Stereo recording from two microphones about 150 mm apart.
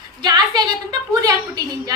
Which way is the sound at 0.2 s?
30° right (ahead or behind).